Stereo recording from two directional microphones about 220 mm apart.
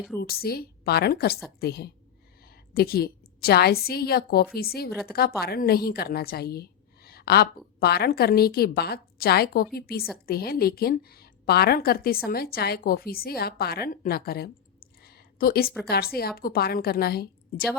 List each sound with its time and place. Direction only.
0.2 s a woman's voice: 45° left (ahead or behind)